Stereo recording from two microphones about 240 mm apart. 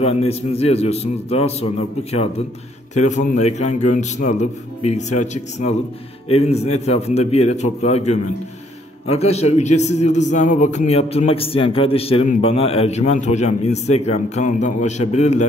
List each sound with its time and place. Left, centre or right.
0.0 s a man's voice: left
2.9 s a man's voice: left